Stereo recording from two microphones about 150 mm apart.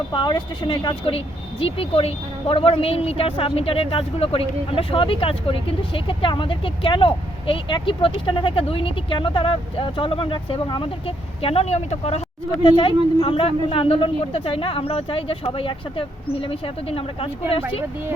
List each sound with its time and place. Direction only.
0.1 s speech: 30° left (ahead or behind)
12.6 s speech: 35° left (ahead or behind)